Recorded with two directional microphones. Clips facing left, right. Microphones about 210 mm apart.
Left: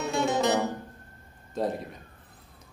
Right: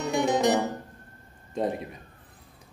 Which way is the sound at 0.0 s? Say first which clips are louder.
Right 2 dB; 15° right (ahead or behind).